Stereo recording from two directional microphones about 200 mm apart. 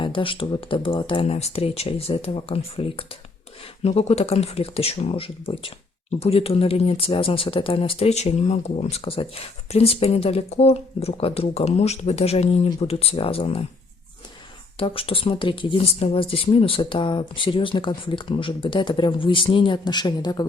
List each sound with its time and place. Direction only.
0.0 s speech: 25° left (ahead or behind)
14.8 s speech: 25° left (ahead or behind)